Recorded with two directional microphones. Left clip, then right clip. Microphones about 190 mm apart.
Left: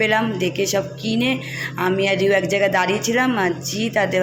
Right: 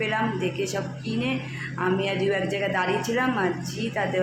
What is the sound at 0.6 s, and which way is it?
Speech, 40° left (ahead or behind).